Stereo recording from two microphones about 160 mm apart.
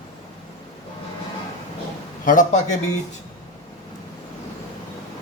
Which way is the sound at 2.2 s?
50° left (ahead or behind).